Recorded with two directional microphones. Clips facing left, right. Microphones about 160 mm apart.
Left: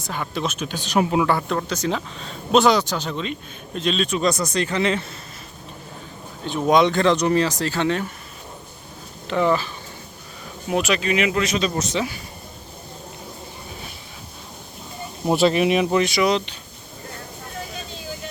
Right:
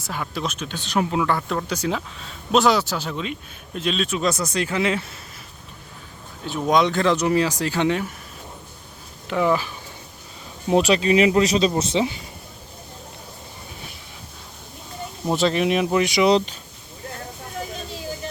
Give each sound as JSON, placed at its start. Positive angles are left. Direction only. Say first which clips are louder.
{"t": 0.0, "sound": "speech", "louder": "left 2 dB", "side_deg": -5}
{"t": 6.4, "sound": "speech", "louder": "left 2 dB", "side_deg": 0}
{"t": 9.2, "sound": "speech", "louder": "left 1 dB", "side_deg": -5}
{"t": 10.7, "sound": "speech", "louder": "right 4 dB", "side_deg": -30}
{"t": 15.3, "sound": "speech", "louder": "left 3 dB", "side_deg": 10}
{"t": 16.0, "sound": "speech", "louder": "right 2 dB", "side_deg": -20}